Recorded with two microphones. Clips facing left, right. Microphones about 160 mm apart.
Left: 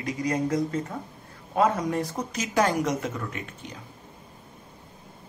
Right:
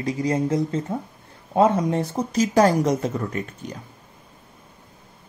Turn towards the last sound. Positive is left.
turn(degrees=-40)  # may be behind; listen again after turning